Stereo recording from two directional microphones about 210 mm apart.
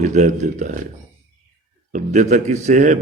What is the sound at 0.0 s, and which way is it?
Speech, 35° right (ahead or behind).